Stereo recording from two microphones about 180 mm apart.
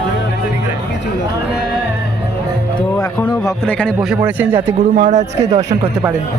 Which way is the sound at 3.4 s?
5° left (ahead or behind).